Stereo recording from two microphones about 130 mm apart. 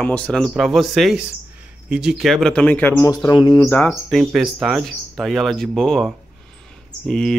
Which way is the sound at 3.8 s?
Centre (ahead or behind).